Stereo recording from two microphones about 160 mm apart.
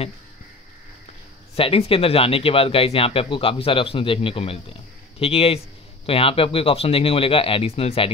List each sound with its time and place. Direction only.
1.5 s speech: 35° left (ahead or behind)